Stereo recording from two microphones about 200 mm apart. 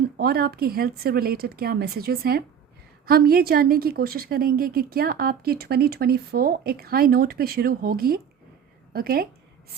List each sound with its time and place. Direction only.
0.2 s a woman's voice: 50° right (ahead or behind)